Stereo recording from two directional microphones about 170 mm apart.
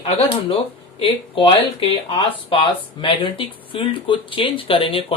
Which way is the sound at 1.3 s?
30° left (ahead or behind).